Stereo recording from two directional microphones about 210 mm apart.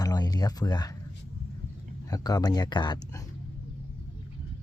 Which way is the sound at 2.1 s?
15° left (ahead or behind).